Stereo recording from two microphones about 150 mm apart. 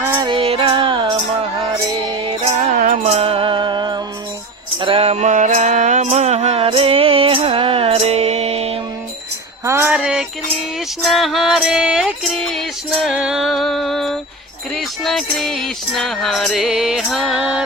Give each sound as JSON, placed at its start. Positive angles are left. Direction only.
{"t": 0.0, "sound": "music", "side_deg": -20}
{"t": 0.3, "sound": "music", "side_deg": -40}
{"t": 2.7, "sound": "music", "side_deg": -55}
{"t": 4.8, "sound": "mantra", "side_deg": -40}
{"t": 9.6, "sound": "music", "side_deg": -15}
{"t": 9.9, "sound": "music", "side_deg": -5}